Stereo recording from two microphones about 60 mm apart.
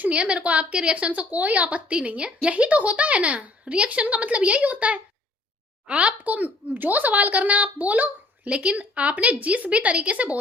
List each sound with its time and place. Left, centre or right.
0.0 s speech: right